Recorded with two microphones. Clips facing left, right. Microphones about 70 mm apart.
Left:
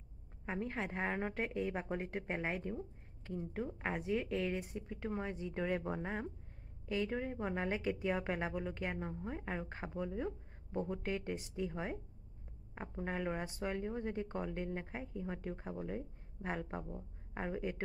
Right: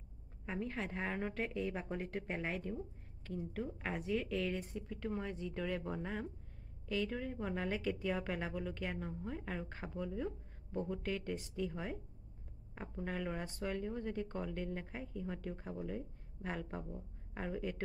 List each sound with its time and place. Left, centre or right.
0.5 s a woman's voice: centre